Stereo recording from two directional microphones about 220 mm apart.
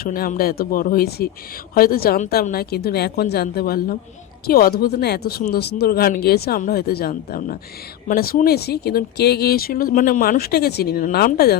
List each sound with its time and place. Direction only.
0.0 s speech: 40° left (ahead or behind)